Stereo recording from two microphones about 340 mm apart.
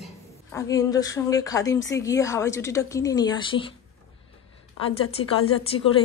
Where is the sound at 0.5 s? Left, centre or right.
Centre.